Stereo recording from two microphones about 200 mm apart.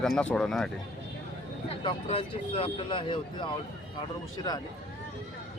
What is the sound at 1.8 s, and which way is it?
Speech, 30° left (ahead or behind).